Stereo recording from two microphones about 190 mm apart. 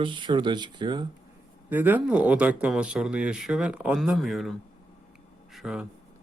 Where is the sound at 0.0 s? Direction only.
25° right (ahead or behind).